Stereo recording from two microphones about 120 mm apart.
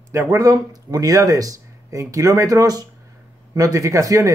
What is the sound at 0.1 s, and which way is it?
Speech, 25° right (ahead or behind).